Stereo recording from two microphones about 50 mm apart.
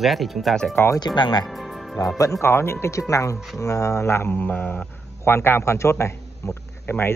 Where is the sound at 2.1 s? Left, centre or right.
Left.